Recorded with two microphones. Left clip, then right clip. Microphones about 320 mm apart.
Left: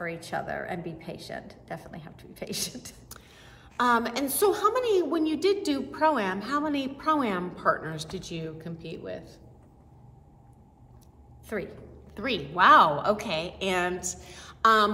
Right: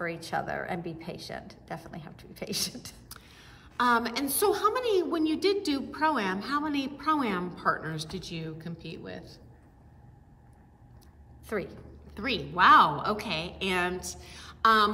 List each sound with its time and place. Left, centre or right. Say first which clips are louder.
0.0 s a woman's voice: right 1 dB; centre
3.1 s a woman's voice: left 1 dB; centre
11.4 s a woman's voice: even; centre
11.7 s a woman's voice: left 2 dB; centre